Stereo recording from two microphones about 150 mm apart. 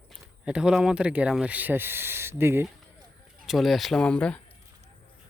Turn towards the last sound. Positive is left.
turn(degrees=5)  # may be behind; listen again after turning